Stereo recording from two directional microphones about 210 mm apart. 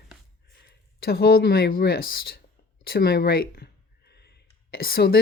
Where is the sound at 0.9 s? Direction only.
45° left (ahead or behind).